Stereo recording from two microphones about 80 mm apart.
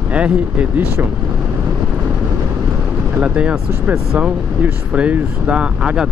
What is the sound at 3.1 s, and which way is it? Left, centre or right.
Speech, centre.